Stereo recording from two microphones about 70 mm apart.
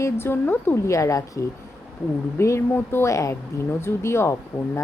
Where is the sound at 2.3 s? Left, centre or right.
Left.